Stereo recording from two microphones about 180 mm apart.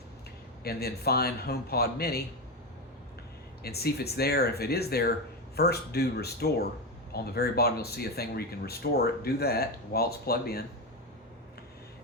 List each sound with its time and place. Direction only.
0.6 s speech: 60° left (ahead or behind)
3.6 s speech: 60° left (ahead or behind)